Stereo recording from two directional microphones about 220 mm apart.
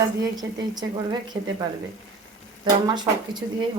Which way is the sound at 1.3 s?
10° right (ahead or behind).